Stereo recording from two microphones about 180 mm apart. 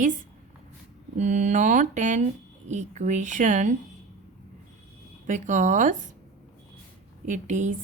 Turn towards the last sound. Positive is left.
turn(degrees=-45)  # may be behind; listen again after turning